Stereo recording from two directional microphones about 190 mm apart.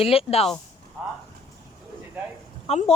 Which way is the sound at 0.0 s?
30° left (ahead or behind).